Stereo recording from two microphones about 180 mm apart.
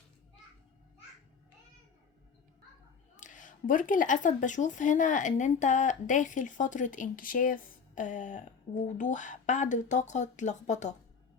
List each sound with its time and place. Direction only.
3.2 s speech: 45° left (ahead or behind)